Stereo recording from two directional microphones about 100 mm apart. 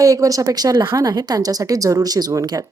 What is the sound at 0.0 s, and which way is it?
Speech, 35° right (ahead or behind).